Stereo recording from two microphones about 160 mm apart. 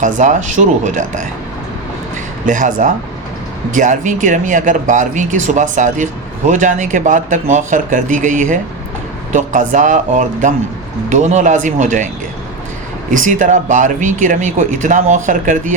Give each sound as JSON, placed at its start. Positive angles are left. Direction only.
{"t": 0.0, "sound": "speech", "side_deg": -50}
{"t": 2.5, "sound": "speech", "side_deg": -55}
{"t": 13.1, "sound": "speech", "side_deg": -55}